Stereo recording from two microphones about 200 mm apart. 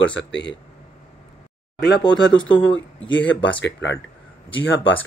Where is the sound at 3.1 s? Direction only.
65° left (ahead or behind).